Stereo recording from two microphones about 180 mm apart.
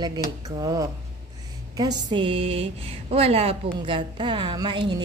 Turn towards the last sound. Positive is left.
turn(degrees=-25)  # may be behind; listen again after turning